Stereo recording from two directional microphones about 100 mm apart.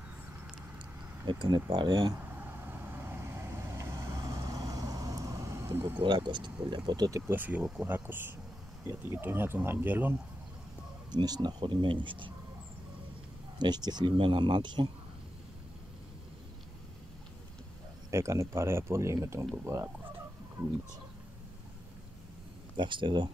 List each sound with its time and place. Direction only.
1.2 s speech: 50° right (ahead or behind)
2.3 s vehicle: 20° right (ahead or behind)
4.4 s vehicle: 40° right (ahead or behind); by 6.0 s 25° right (ahead or behind)
6.0 s speech: 50° right (ahead or behind)
7.2 s speech: 15° right (ahead or behind)
11.1 s speech: 45° right (ahead or behind)
13.6 s speech: 45° right (ahead or behind)
14.1 s speech: 60° right (ahead or behind)
18.1 s speech: 30° right (ahead or behind)
22.8 s speech: 55° right (ahead or behind)